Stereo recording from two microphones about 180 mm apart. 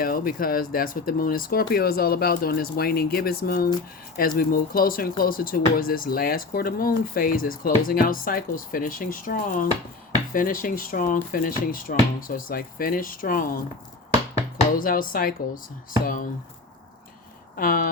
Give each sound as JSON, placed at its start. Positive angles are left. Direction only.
{"t": 0.0, "sound": "speech", "side_deg": 55}
{"t": 14.8, "sound": "speech", "side_deg": 50}
{"t": 17.6, "sound": "speech", "side_deg": 55}